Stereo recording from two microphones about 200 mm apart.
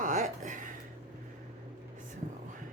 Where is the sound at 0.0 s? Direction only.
40° right (ahead or behind).